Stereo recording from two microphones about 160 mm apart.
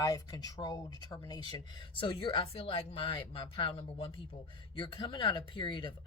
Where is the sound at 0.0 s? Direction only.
25° left (ahead or behind).